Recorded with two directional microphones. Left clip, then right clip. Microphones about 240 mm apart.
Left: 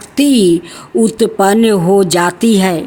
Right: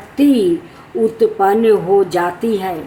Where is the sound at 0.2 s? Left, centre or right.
Left.